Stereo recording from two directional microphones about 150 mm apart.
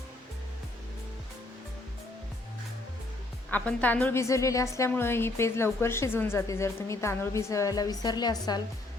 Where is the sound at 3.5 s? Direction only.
10° left (ahead or behind).